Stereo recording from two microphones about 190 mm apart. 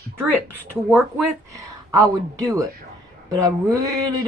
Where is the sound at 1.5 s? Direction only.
20° right (ahead or behind).